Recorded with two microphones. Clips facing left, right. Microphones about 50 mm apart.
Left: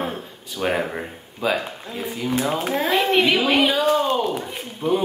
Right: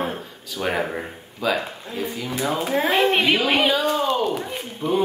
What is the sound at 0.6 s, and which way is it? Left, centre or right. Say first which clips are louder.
Speech: left 1 dB; centre.